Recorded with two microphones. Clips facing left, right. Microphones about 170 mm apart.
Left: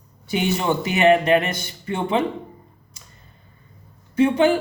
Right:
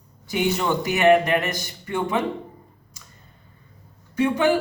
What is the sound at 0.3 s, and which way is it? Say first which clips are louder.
Speech: left 1 dB; 20° left (ahead or behind).